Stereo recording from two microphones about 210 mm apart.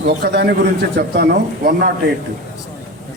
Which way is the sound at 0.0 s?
50° right (ahead or behind).